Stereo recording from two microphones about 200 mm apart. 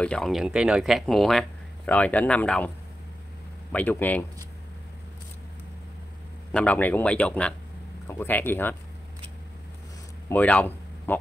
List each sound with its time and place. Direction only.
0.0 s speech: 5° left (ahead or behind)
3.7 s speech: 10° left (ahead or behind)
6.5 s speech: 5° left (ahead or behind)
10.3 s speech: 10° left (ahead or behind)